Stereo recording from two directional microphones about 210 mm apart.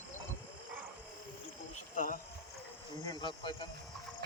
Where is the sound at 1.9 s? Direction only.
40° left (ahead or behind).